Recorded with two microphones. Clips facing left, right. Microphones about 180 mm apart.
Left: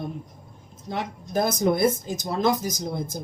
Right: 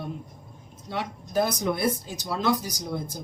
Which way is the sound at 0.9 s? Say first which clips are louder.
Even; 45° left (ahead or behind).